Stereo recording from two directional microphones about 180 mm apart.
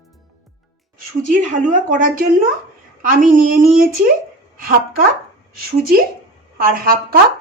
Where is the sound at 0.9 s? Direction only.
45° right (ahead or behind).